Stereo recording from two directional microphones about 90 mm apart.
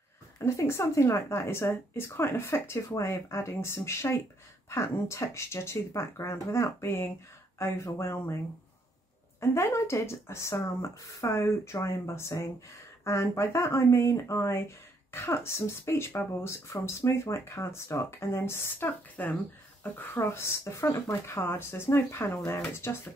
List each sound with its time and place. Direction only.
0.5 s speech: 30° left (ahead or behind)
9.4 s speech: 30° left (ahead or behind)